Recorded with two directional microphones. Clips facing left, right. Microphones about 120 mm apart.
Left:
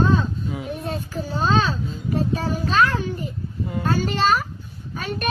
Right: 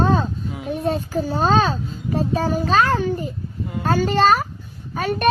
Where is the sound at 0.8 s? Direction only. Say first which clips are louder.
Right 7 dB; 40° right (ahead or behind).